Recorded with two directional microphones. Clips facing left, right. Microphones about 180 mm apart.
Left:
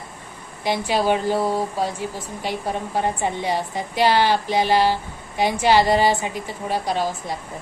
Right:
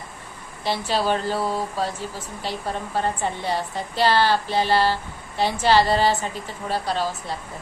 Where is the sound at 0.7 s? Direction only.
15° left (ahead or behind).